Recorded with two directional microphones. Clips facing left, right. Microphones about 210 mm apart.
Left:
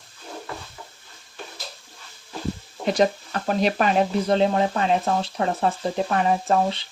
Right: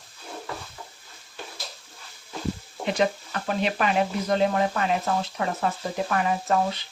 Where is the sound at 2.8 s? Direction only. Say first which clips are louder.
Left 4 dB; 40° left (ahead or behind).